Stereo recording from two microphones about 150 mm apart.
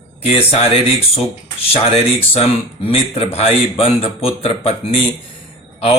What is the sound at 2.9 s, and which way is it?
Speech, 40° left (ahead or behind).